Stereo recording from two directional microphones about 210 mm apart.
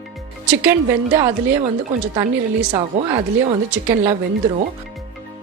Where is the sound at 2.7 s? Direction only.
20° right (ahead or behind).